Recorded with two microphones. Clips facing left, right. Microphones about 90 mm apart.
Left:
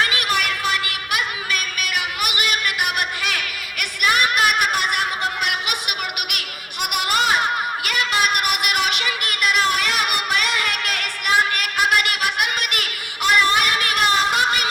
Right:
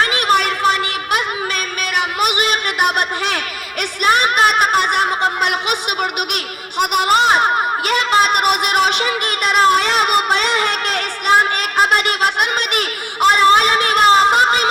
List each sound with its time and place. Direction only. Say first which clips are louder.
0.0 s music: right 6 dB; 35° right (ahead or behind)